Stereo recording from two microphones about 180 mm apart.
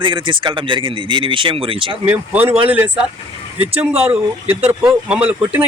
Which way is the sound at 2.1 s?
10° right (ahead or behind).